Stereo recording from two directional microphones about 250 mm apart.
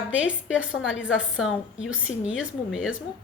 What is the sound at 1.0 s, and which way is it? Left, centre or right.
A woman's voice, centre.